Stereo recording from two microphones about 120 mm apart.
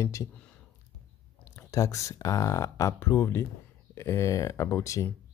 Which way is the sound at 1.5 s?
25° left (ahead or behind).